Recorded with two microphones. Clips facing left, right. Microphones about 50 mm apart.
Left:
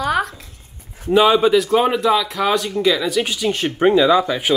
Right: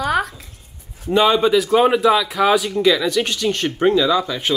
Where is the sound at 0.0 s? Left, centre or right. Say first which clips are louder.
Even; centre.